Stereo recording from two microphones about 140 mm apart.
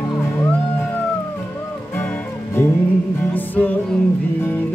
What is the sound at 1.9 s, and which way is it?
Music, 15° left (ahead or behind).